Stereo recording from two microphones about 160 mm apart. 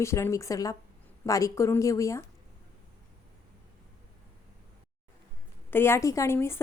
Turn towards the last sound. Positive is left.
turn(degrees=15)  # may be behind; listen again after turning